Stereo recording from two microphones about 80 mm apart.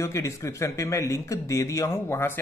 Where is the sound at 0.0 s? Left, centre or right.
Left.